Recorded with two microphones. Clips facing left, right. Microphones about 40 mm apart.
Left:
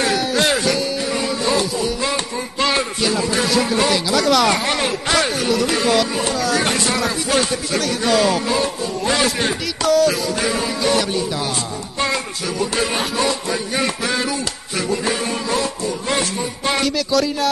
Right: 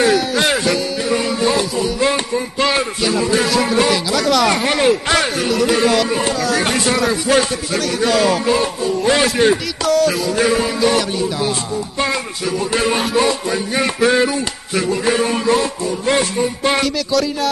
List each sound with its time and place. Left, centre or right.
0.0 s music: centre
2.0 s music: right
2.3 s speech: centre
8.5 s speech: centre
12.0 s speech: centre
14.0 s a sound: right
16.8 s speech: centre